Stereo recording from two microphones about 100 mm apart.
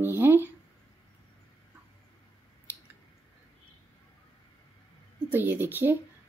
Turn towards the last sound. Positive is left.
turn(degrees=-20)  # may be behind; listen again after turning